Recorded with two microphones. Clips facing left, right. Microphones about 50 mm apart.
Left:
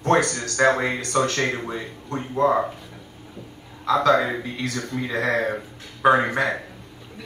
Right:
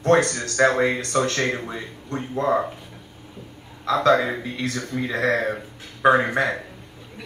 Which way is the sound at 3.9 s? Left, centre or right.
Centre.